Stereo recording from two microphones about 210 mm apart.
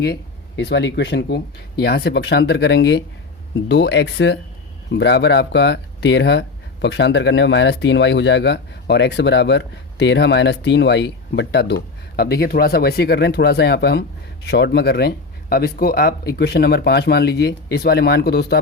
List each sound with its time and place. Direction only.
0.0 s speech: 50° left (ahead or behind)